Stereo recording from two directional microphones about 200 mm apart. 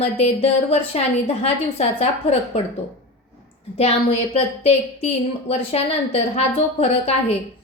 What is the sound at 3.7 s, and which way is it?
A woman's voice, 30° left (ahead or behind).